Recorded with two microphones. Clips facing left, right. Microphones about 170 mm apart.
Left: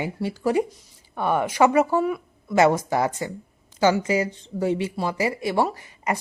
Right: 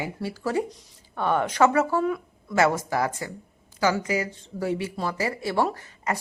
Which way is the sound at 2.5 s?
20° left (ahead or behind).